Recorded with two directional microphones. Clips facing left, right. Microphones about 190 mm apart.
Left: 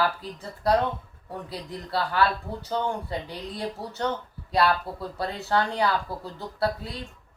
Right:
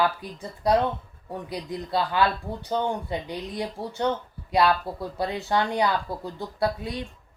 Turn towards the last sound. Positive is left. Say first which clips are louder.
# right 1 dB
turn(degrees=-15)  # may be behind; listen again after turning